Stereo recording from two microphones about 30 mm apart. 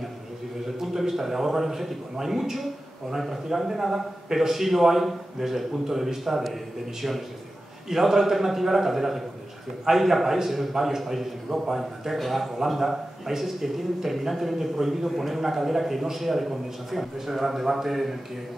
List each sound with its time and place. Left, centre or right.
0.7 s a sound: centre
2.1 s a man's voice: centre
2.5 s a man's voice: centre
10.7 s a man's voice: centre